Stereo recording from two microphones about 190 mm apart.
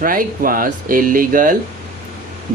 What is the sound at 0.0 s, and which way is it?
Speech, 45° right (ahead or behind).